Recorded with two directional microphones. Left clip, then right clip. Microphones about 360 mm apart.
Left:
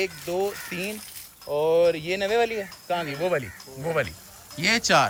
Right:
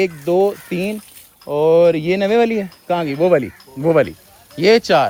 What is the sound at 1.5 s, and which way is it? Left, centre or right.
Speech, right.